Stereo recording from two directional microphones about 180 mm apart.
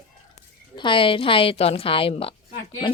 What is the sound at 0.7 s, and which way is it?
A woman's voice, 25° left (ahead or behind).